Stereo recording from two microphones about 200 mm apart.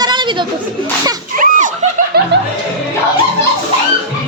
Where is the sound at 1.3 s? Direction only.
40° right (ahead or behind).